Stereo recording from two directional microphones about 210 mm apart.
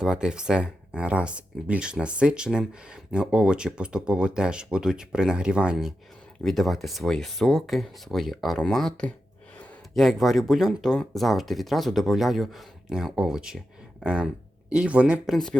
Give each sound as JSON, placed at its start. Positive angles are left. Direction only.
{"t": 0.0, "sound": "speech", "side_deg": -5}